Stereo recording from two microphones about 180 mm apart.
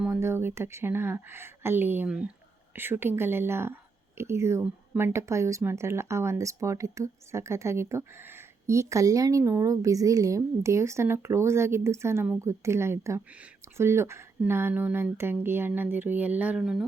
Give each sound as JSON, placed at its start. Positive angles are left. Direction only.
{"t": 0.0, "sound": "speech", "side_deg": -10}